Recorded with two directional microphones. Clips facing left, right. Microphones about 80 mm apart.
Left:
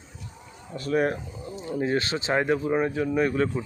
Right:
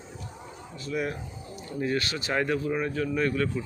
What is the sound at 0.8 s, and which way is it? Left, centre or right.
Speech, left.